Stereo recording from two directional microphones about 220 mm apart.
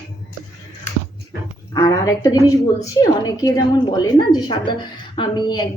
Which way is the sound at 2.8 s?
15° left (ahead or behind).